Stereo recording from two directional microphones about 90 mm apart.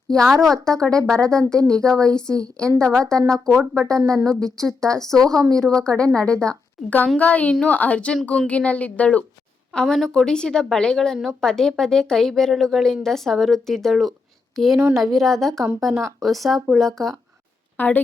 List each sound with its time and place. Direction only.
0.1 s a woman's voice: 5° left (ahead or behind)
9.7 s a woman's voice: 5° left (ahead or behind)
15.9 s speech: 30° right (ahead or behind)
16.2 s a woman's voice: centre (ahead or behind)
17.7 s a woman's voice: 20° left (ahead or behind)